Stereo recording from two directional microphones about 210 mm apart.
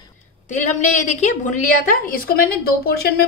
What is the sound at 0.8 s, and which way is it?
A woman's voice, 35° left (ahead or behind).